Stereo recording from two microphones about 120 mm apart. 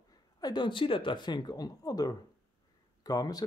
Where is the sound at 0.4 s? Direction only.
40° left (ahead or behind).